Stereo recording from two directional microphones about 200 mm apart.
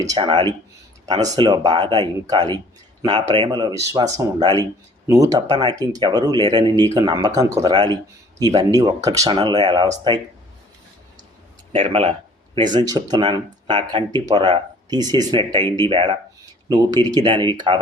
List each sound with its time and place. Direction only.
0.0 s speech: 20° right (ahead or behind)
11.7 s speech: 30° right (ahead or behind)